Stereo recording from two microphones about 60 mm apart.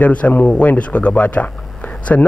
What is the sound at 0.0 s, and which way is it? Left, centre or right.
A man's voice, left.